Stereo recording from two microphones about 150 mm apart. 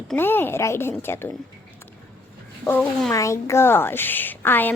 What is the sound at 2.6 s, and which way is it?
Speech, 10° left (ahead or behind).